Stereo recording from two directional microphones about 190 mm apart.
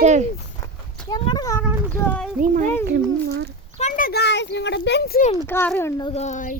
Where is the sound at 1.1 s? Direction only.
20° left (ahead or behind).